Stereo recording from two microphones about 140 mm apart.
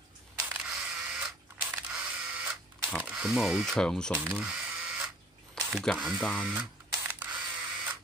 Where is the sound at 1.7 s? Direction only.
10° right (ahead or behind).